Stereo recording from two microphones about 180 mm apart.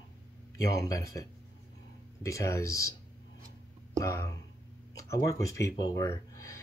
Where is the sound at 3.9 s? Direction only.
15° left (ahead or behind).